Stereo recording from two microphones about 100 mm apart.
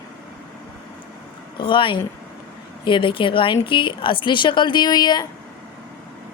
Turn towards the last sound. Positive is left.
turn(degrees=45)  # may be behind; listen again after turning